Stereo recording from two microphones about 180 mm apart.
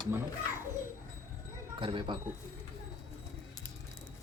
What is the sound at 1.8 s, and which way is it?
Speech, 30° right (ahead or behind).